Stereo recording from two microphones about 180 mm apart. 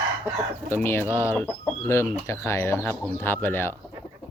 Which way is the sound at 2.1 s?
15° left (ahead or behind).